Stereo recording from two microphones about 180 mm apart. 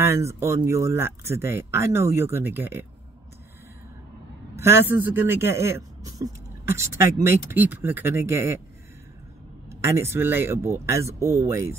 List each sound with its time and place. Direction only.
0.0 s a man's voice: 15° right (ahead or behind)
4.6 s a man's voice: 15° right (ahead or behind)
9.7 s a man's voice: 15° right (ahead or behind)